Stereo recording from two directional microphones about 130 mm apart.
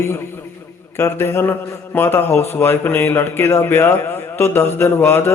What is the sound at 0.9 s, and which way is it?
A man's voice, 20° left (ahead or behind).